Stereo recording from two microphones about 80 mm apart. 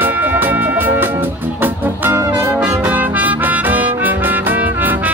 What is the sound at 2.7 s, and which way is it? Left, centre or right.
Music, right.